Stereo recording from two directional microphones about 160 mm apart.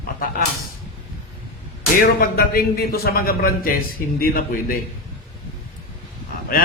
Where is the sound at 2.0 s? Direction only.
65° left (ahead or behind).